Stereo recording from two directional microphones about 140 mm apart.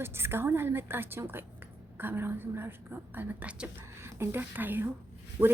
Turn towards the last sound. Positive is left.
turn(degrees=-25)  # may be behind; listen again after turning